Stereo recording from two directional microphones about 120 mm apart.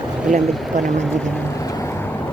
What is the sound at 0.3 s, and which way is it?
Speech, 85° right.